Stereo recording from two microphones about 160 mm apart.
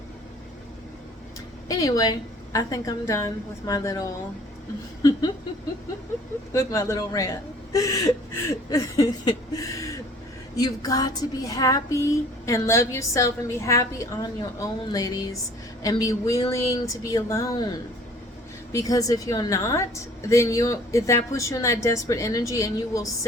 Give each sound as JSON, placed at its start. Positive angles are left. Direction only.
{"t": 1.6, "sound": "speech", "side_deg": 20}
{"t": 6.5, "sound": "speech", "side_deg": 20}
{"t": 18.7, "sound": "speech", "side_deg": 20}